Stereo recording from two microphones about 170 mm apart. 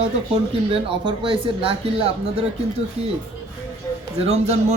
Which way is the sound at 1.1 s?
30° right (ahead or behind).